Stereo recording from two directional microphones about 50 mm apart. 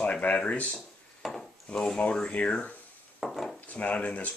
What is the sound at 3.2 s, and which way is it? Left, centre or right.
Dishes, centre.